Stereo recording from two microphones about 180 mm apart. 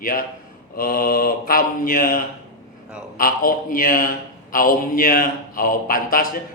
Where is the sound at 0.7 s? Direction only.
55° left (ahead or behind).